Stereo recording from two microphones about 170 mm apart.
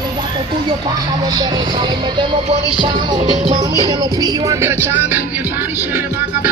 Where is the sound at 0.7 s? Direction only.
25° right (ahead or behind).